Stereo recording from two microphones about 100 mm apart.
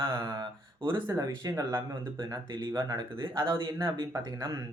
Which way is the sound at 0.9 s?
30° right (ahead or behind).